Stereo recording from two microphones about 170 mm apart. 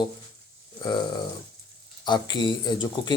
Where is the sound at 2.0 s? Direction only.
25° left (ahead or behind).